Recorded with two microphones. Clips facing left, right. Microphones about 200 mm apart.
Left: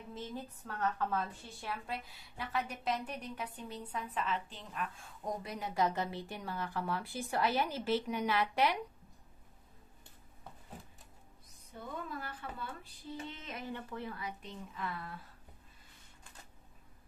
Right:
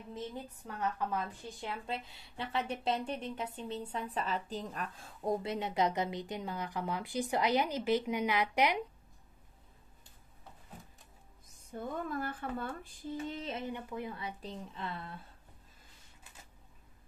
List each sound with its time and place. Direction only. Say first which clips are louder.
0.7 s speech: even; 15° right (ahead or behind)
11.7 s a sound: right 6 dB; 45° right (ahead or behind)
13.5 s speech: right 3 dB; 20° right (ahead or behind)